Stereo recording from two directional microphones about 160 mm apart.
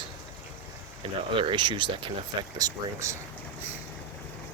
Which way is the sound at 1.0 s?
35° right (ahead or behind).